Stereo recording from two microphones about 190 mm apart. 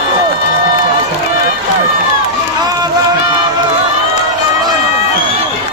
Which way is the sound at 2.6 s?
20° right (ahead or behind).